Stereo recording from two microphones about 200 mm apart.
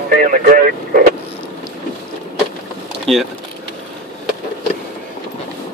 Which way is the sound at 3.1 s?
Centre (ahead or behind).